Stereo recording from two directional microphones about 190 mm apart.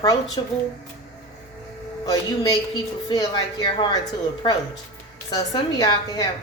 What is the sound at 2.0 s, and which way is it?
Speech, 20° left (ahead or behind).